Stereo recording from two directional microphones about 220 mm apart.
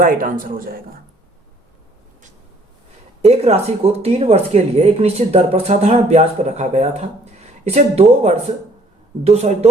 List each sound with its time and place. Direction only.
0.0 s speech: 40° right (ahead or behind)
3.2 s speech: 30° right (ahead or behind)